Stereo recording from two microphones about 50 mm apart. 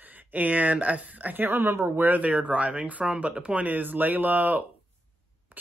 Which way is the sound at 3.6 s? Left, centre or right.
Right.